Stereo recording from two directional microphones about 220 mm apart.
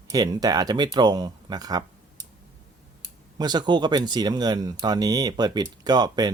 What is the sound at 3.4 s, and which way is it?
Speech, 20° right (ahead or behind).